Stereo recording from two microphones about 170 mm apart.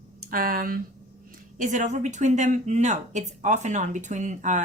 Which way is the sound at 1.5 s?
45° right (ahead or behind).